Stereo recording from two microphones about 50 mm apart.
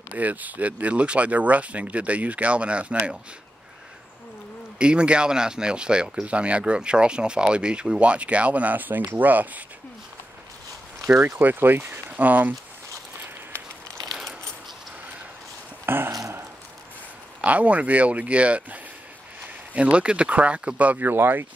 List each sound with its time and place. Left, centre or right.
0.1 s speech: right
4.7 s speech: right
11.1 s speech: right
15.8 s a sound: right
17.4 s speech: right
21.0 s speech: right